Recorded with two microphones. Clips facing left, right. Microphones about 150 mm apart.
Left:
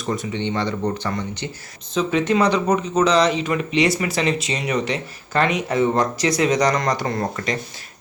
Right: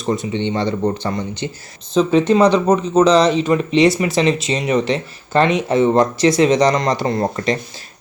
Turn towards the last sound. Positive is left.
turn(degrees=-30)  # may be behind; listen again after turning